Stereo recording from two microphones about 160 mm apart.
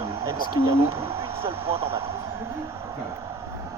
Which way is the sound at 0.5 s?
35° right (ahead or behind).